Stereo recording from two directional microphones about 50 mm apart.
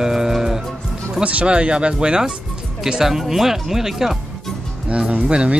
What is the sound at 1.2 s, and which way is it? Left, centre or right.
Speech, right.